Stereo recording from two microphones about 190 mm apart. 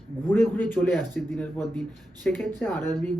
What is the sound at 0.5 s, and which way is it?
A man's voice, 10° left (ahead or behind).